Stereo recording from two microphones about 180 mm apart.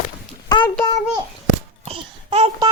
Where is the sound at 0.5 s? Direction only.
25° left (ahead or behind).